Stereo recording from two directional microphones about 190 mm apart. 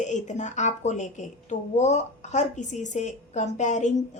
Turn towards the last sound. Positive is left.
turn(degrees=40)  # may be behind; listen again after turning